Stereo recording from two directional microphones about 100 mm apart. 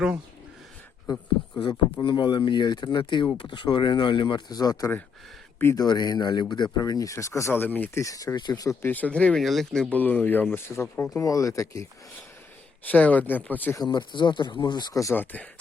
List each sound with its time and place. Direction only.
1.5 s speech: 55° left (ahead or behind); by 8.0 s 20° left (ahead or behind)
8.0 s speech: 35° left (ahead or behind)
8.8 s speech: 15° left (ahead or behind)
9.4 s speech: centre (ahead or behind); by 11.9 s 35° left (ahead or behind)
12.9 s speech: 15° left (ahead or behind)
13.8 s speech: 50° left (ahead or behind)
15.1 s speech: 20° left (ahead or behind)